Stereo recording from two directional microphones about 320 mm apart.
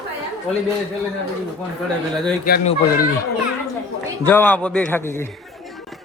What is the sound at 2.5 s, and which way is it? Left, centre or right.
Speech, left.